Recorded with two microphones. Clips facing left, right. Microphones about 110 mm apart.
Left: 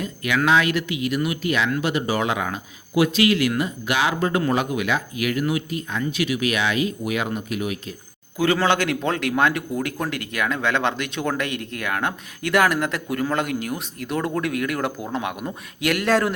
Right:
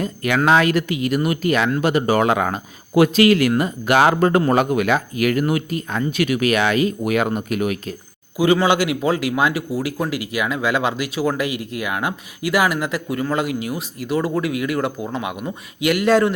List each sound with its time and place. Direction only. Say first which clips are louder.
0.0 s speech: right 3 dB; 40° right (ahead or behind)
8.6 s speech: right 3 dB; 10° right (ahead or behind)